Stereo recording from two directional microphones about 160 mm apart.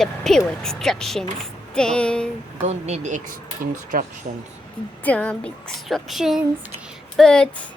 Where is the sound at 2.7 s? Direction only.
45° right (ahead or behind).